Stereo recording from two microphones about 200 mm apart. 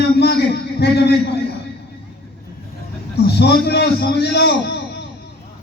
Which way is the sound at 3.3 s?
55° left (ahead or behind).